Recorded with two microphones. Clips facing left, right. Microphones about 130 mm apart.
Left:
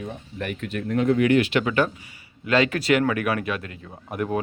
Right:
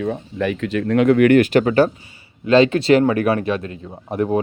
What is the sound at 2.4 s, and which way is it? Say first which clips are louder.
Speech: right 8 dB; 25° right (ahead or behind).